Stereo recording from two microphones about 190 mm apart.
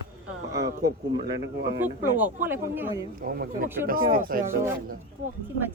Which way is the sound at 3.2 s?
50° right (ahead or behind).